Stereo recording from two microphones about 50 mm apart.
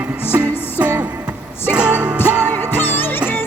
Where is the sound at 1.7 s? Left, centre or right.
Right.